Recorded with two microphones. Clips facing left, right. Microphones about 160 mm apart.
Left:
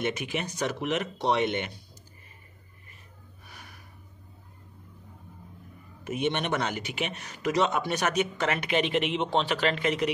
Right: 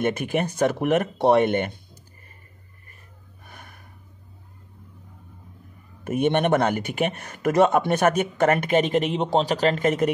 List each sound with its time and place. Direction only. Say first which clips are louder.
0.0 s speech: right 7 dB; 50° right (ahead or behind)
3.4 s gasp: right 4 dB; 50° right (ahead or behind)
6.0 s speech: right 8 dB; 55° right (ahead or behind)